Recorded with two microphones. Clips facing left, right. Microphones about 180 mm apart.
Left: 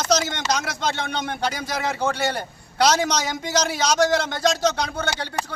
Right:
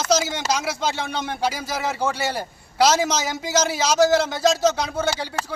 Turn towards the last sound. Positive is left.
turn(degrees=15)  # may be behind; listen again after turning